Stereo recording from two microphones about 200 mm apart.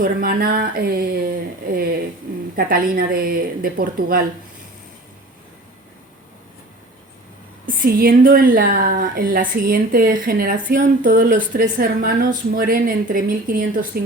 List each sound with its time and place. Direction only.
0.0 s a woman's voice: 45° right (ahead or behind)
7.7 s a woman's voice: 45° right (ahead or behind)